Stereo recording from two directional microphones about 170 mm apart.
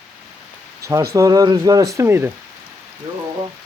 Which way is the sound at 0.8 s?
20° right (ahead or behind).